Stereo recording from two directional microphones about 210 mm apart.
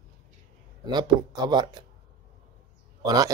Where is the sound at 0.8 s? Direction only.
20° right (ahead or behind).